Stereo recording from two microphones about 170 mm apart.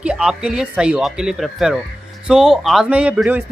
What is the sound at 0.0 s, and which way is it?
Speech, 5° right (ahead or behind).